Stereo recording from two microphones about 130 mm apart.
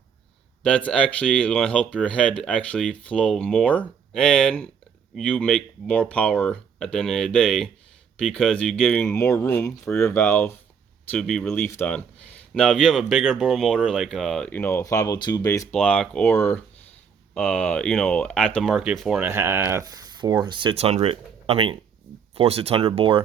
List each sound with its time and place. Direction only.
0.6 s speech: 10° left (ahead or behind)
9.0 s speech: 20° left (ahead or behind)
11.1 s speech: 5° left (ahead or behind)
12.5 s speech: 5° left (ahead or behind); by 15.6 s 25° left (ahead or behind)
15.7 s speech: 10° left (ahead or behind)
19.2 s speech: 15° right (ahead or behind); by 20.7 s 35° right (ahead or behind)
20.7 s speech: 50° right (ahead or behind)